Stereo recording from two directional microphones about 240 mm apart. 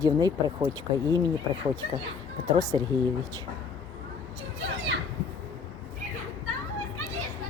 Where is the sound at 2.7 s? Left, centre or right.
Centre.